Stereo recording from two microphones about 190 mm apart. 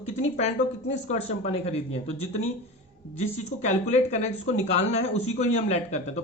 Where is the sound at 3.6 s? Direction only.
35° left (ahead or behind).